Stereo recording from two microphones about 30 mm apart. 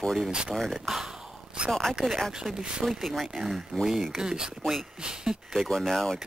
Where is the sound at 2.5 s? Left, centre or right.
Right.